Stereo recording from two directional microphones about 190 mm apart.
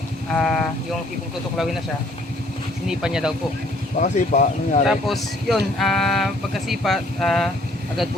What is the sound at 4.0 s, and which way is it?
Speech, 40° left (ahead or behind).